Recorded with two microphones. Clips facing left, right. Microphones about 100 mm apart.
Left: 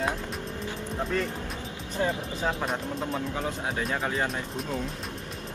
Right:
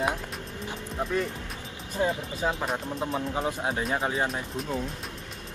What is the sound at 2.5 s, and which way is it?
Speech, 5° right (ahead or behind).